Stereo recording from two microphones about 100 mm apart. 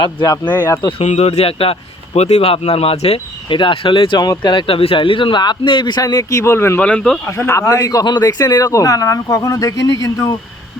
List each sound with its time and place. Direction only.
0.9 s speech: 80° left; by 4.2 s 60° left (ahead or behind)
4.2 s a man's voice: 45° left (ahead or behind); by 6.8 s 25° left (ahead or behind)
6.8 s speech: 10° left (ahead or behind)
7.3 s speech: 25° left (ahead or behind)